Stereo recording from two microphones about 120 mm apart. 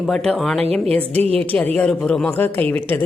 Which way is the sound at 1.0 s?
60° right (ahead or behind).